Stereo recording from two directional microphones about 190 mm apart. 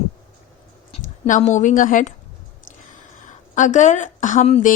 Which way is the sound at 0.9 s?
35° left (ahead or behind).